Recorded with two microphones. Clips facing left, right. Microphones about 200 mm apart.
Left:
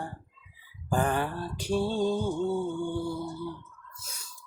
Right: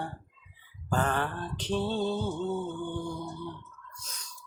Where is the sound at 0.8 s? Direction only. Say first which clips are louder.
Left 2 dB; 10° left (ahead or behind).